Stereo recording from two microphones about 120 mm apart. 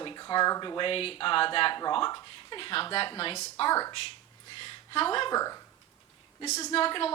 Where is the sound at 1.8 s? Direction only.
35° left (ahead or behind).